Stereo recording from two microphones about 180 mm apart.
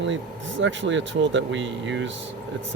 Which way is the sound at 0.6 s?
90° right.